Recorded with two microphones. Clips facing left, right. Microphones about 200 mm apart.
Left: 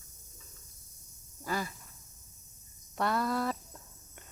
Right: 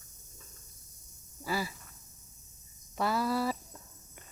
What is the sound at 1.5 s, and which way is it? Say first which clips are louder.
Speech: right 1 dB; 5° right (ahead or behind).